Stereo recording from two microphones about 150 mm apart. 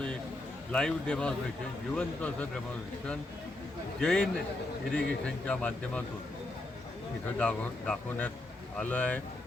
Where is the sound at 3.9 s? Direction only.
5° left (ahead or behind).